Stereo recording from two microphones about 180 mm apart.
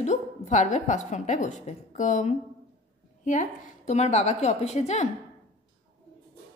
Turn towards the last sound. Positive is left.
turn(degrees=40)  # may be behind; listen again after turning